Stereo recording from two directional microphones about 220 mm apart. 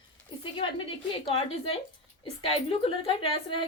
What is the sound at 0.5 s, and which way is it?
Speech, 25° left (ahead or behind).